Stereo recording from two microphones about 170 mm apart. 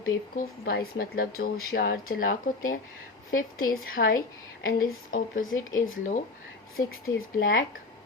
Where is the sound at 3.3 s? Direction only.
55° left (ahead or behind).